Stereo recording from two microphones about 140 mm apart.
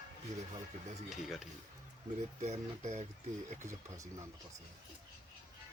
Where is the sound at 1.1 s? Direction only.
Centre (ahead or behind).